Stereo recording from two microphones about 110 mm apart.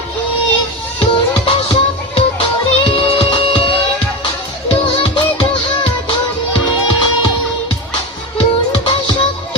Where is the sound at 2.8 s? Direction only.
55° left (ahead or behind).